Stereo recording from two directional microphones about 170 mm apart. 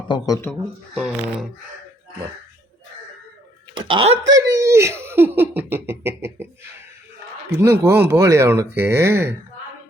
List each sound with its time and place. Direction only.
0.5 s speech: 5° left (ahead or behind)
3.8 s speech: 30° right (ahead or behind)
4.4 s speech: 20° right (ahead or behind)
7.6 s speech: 15° right (ahead or behind)